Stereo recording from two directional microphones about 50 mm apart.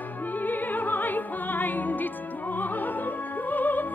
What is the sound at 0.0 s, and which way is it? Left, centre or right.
Music, left.